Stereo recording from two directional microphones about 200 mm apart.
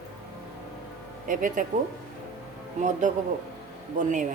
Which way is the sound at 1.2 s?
40° right (ahead or behind).